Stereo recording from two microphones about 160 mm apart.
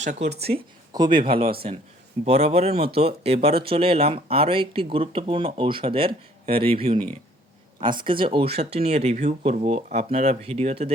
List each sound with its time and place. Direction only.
0.0 s speech: 45° right (ahead or behind)
0.9 s speech: 30° right (ahead or behind)